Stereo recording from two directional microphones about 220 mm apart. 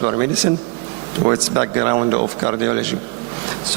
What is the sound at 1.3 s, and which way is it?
Speech, 20° right (ahead or behind).